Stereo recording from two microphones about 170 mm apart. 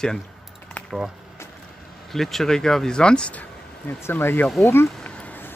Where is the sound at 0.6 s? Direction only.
10° left (ahead or behind).